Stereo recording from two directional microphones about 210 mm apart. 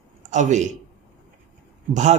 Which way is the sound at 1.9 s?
35° right (ahead or behind).